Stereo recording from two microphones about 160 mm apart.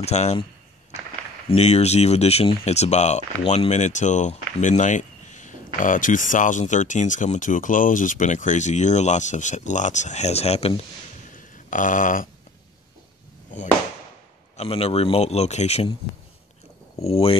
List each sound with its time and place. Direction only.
0.0 s speech: 45° left (ahead or behind)
1.5 s speech: 40° left (ahead or behind)
11.3 s a sound: 55° left (ahead or behind)
14.6 s a man's voice: 35° left (ahead or behind)
17.0 s a man's voice: 35° left (ahead or behind)